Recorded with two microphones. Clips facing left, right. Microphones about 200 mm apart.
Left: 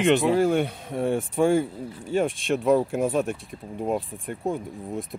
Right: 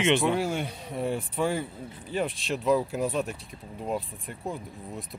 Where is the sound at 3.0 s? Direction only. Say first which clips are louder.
Left 5 dB; 50° left (ahead or behind).